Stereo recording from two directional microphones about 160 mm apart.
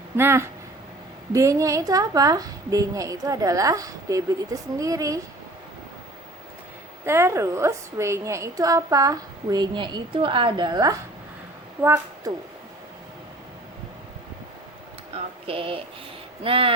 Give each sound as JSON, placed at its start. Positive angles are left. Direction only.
{"t": 0.2, "sound": "a woman's voice", "side_deg": -15}
{"t": 7.0, "sound": "a woman's voice", "side_deg": -15}
{"t": 15.1, "sound": "speech", "side_deg": -35}